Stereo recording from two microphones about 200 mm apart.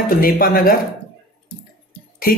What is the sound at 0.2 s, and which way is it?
Speech, 50° left (ahead or behind).